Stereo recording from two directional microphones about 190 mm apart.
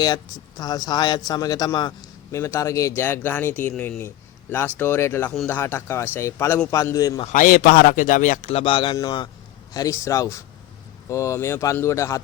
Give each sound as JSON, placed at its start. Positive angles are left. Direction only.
{"t": 0.0, "sound": "speech", "side_deg": 20}
{"t": 7.3, "sound": "a man's voice", "side_deg": 50}